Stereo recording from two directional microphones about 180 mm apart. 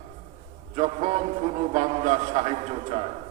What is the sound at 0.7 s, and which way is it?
A man's voice, 35° right (ahead or behind).